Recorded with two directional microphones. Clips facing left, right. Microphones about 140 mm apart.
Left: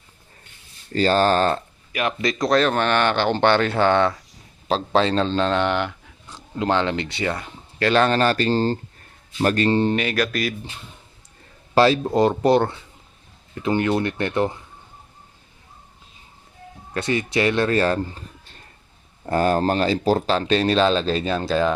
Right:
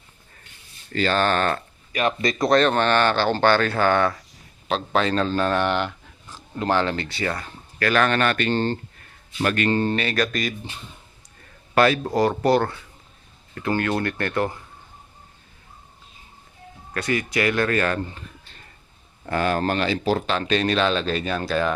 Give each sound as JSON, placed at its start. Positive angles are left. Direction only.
{"t": 0.9, "sound": "speech", "side_deg": 35}
{"t": 1.9, "sound": "speech", "side_deg": 5}
{"t": 9.9, "sound": "speech", "side_deg": 10}
{"t": 11.7, "sound": "a man's voice", "side_deg": 25}
{"t": 16.9, "sound": "a man's voice", "side_deg": 25}
{"t": 19.2, "sound": "speech", "side_deg": 40}